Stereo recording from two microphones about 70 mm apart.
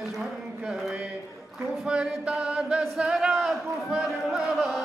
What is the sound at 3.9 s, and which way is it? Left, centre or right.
Chant, centre.